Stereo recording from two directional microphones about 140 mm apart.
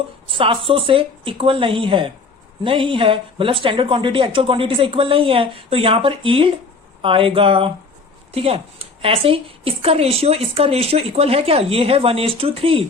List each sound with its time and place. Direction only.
0.3 s a woman's voice: 40° right (ahead or behind)